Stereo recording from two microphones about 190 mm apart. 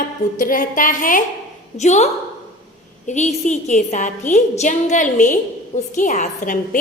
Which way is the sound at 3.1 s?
40° left (ahead or behind).